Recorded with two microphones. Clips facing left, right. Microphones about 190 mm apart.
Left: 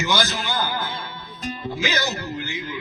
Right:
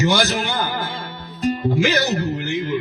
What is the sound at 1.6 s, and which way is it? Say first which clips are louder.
Speech: right 5 dB; 50° right (ahead or behind).